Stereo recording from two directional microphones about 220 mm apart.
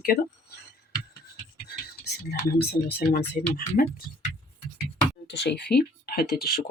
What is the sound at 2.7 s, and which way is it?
Speech, 45° left (ahead or behind).